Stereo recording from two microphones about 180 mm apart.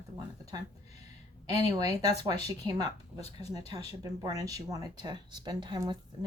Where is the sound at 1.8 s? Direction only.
20° right (ahead or behind).